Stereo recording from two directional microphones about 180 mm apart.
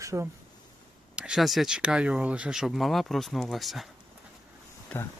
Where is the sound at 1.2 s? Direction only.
Centre (ahead or behind).